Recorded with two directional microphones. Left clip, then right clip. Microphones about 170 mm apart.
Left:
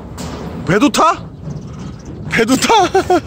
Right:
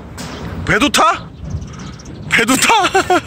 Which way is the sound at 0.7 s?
15° left (ahead or behind).